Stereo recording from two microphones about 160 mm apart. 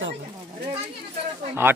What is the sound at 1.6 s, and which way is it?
Speech, 15° right (ahead or behind).